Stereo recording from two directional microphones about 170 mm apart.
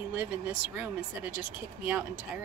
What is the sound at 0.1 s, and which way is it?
Speech, 10° right (ahead or behind).